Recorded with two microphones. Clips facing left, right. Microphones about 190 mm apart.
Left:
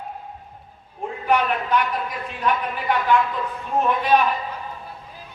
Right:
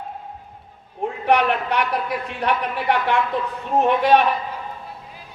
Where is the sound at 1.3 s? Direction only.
70° right (ahead or behind).